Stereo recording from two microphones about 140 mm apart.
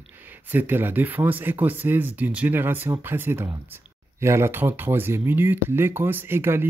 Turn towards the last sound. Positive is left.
turn(degrees=-15)  # may be behind; listen again after turning